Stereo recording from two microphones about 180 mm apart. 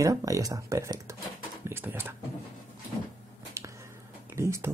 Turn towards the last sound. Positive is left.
turn(degrees=-15)  # may be behind; listen again after turning